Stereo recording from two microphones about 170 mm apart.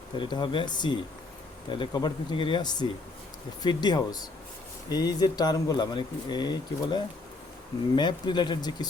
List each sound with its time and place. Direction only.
0.2 s a man's voice: 25° left (ahead or behind)